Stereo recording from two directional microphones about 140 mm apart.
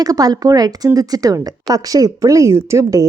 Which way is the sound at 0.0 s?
25° right (ahead or behind).